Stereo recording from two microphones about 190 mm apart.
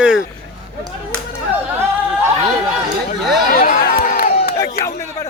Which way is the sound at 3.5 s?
50° left (ahead or behind).